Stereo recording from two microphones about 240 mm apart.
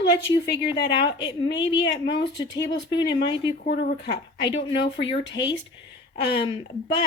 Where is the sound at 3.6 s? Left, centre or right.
Left.